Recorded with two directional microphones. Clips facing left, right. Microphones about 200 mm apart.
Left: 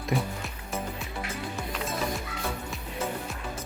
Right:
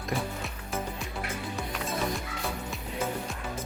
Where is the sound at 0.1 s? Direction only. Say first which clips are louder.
Left 3 dB; centre (ahead or behind).